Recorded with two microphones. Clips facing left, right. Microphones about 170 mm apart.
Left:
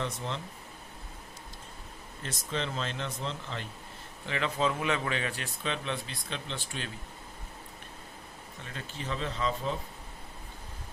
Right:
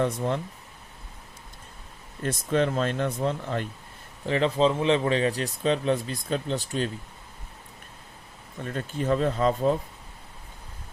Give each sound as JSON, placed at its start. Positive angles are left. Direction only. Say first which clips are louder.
{"t": 0.0, "sound": "speech", "louder": "right 9 dB", "side_deg": -55}
{"t": 2.2, "sound": "speech", "louder": "right 11 dB", "side_deg": -55}
{"t": 4.3, "sound": "speech", "louder": "right 8 dB", "side_deg": -35}
{"t": 8.6, "sound": "speech", "louder": "right 11 dB", "side_deg": -50}